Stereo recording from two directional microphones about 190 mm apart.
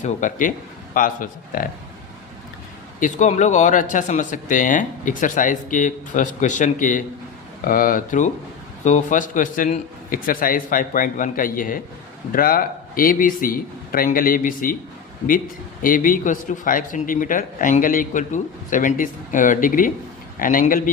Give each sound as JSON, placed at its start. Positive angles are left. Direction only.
{"t": 0.0, "sound": "a man's voice", "side_deg": 40}
{"t": 3.0, "sound": "a man's voice", "side_deg": 40}
{"t": 15.8, "sound": "a man's voice", "side_deg": 45}